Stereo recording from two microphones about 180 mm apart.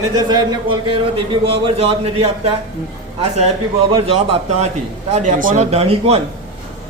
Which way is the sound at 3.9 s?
35° right (ahead or behind).